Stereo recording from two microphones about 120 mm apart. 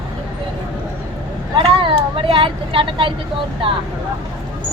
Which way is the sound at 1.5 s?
45° right (ahead or behind).